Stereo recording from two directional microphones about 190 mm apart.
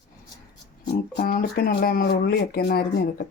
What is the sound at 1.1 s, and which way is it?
Speech, 55° left (ahead or behind).